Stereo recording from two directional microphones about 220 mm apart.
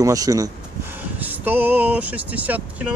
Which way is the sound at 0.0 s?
15° right (ahead or behind).